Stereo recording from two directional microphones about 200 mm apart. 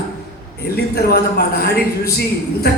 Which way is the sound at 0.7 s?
50° left (ahead or behind).